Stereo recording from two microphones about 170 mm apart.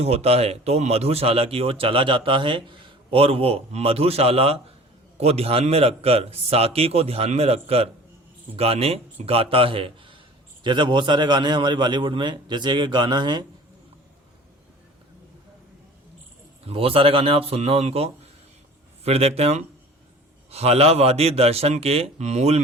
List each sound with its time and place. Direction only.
0.0 s a man's voice: 35° right (ahead or behind)
16.6 s speech: 35° right (ahead or behind)